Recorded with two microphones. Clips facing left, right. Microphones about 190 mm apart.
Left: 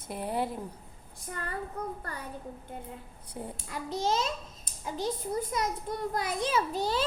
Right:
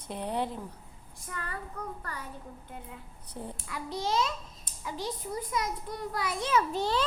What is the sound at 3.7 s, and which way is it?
A child's voice, 45° left (ahead or behind).